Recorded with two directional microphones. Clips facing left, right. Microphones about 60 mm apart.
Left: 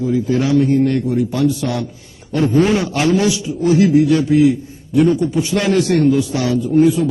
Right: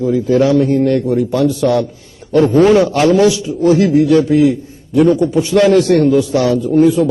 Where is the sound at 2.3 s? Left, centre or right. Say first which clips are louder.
Right 6 dB; right.